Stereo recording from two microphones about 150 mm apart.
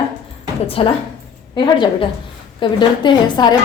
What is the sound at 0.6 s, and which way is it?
A woman's voice, 40° left (ahead or behind).